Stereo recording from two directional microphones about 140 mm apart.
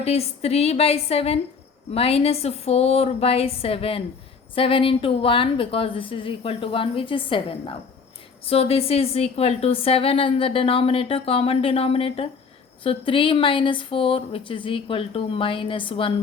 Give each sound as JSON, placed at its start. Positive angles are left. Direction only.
{"t": 0.0, "sound": "a woman's voice", "side_deg": 45}
{"t": 8.4, "sound": "a woman's voice", "side_deg": 45}